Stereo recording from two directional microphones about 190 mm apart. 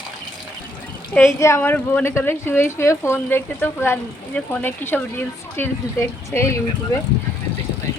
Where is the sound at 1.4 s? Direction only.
15° left (ahead or behind).